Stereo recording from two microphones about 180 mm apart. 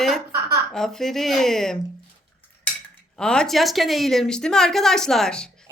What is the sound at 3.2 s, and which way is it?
A woman's voice, 5° left (ahead or behind).